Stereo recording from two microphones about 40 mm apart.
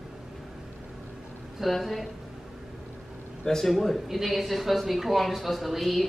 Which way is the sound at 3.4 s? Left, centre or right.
Centre.